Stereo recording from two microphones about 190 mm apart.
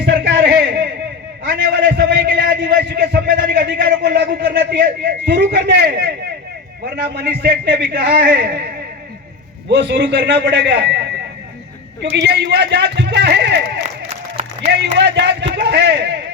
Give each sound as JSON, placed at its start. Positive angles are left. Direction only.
{"t": 0.0, "sound": "a sound", "side_deg": -70}
{"t": 2.0, "sound": "a man's voice", "side_deg": -70}
{"t": 3.8, "sound": "a man's voice", "side_deg": -60}
{"t": 12.1, "sound": "a man's voice", "side_deg": -65}